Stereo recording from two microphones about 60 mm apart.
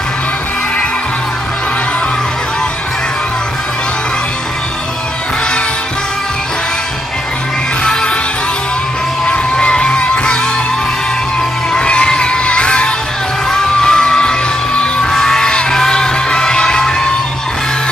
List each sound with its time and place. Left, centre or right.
7.8 s music: centre
9.2 s music: centre
11.7 s music: centre